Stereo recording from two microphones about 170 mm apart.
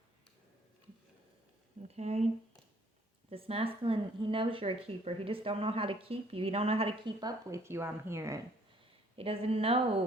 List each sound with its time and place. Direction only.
1.9 s speech: 40° right (ahead or behind); by 8.4 s 15° right (ahead or behind)
9.1 s speech: 35° right (ahead or behind)